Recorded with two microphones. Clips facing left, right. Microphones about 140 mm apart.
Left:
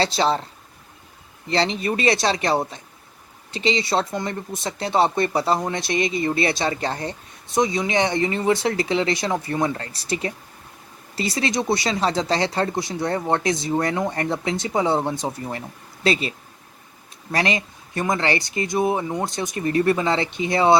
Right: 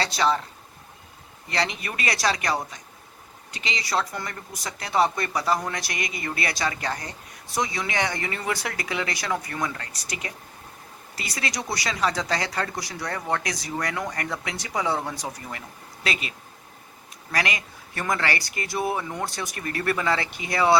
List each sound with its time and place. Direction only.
0.0 s speech: 30° left (ahead or behind)
1.5 s speech: 30° left (ahead or behind)
17.3 s speech: 25° left (ahead or behind)